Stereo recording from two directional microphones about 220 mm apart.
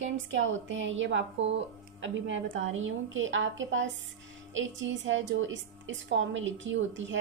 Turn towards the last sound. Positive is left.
turn(degrees=-55)  # may be behind; listen again after turning